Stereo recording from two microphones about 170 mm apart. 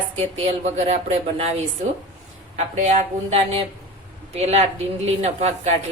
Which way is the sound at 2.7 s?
45° right (ahead or behind).